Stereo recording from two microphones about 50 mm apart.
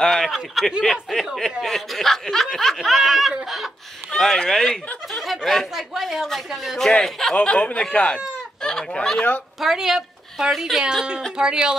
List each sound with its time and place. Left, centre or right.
0.0 s speech: centre
4.1 s speech: centre
7.4 s speech: left
9.6 s speech: centre
11.3 s speech: centre